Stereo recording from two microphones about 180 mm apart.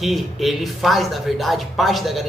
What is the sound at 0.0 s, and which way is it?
Speech, centre (ahead or behind).